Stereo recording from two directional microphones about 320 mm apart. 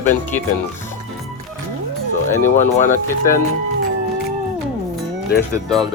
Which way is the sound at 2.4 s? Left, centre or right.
Left.